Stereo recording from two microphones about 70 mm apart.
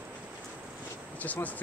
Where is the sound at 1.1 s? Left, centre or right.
Left.